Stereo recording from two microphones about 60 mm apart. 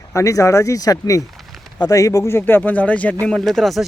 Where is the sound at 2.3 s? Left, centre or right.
Left.